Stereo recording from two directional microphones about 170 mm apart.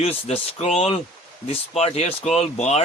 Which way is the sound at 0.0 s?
35° left (ahead or behind).